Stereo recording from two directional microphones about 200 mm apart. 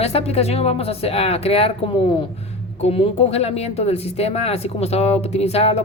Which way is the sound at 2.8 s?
30° left (ahead or behind).